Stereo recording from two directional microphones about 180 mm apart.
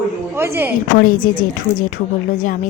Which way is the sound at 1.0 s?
50° left (ahead or behind).